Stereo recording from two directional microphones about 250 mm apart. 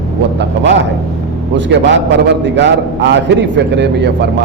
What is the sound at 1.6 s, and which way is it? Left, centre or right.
A man's voice, right.